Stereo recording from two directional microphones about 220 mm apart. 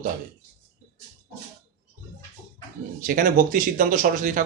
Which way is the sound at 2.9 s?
40° right (ahead or behind).